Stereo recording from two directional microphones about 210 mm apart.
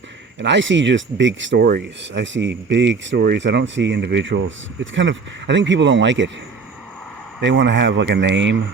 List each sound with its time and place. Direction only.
0.3 s speech: 60° right (ahead or behind)
7.4 s speech: 60° right (ahead or behind)